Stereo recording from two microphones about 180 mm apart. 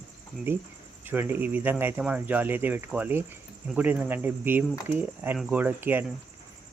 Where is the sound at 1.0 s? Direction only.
10° right (ahead or behind).